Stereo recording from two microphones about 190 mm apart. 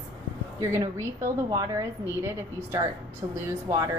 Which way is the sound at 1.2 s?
20° right (ahead or behind).